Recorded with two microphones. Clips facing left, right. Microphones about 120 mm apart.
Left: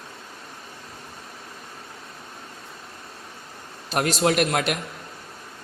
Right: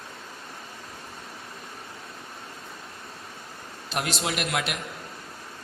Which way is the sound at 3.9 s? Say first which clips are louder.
Left 8 dB; 45° left (ahead or behind).